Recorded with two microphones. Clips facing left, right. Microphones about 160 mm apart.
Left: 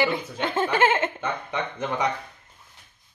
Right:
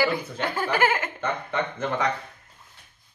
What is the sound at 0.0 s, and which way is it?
Speech, 25° left (ahead or behind).